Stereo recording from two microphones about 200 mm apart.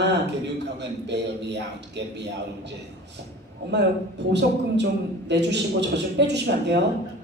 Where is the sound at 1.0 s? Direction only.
60° right (ahead or behind).